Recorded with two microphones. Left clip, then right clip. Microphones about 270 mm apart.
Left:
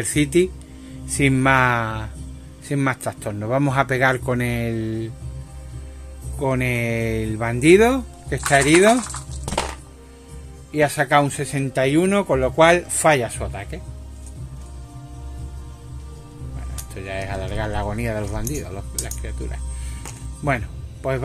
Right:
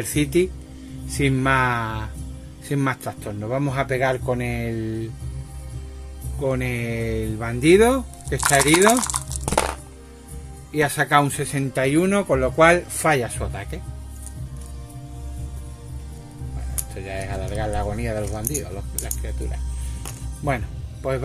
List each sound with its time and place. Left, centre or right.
0.0 s speech: centre
6.4 s speech: centre
10.7 s speech: centre
16.9 s music: centre
18.5 s speech: centre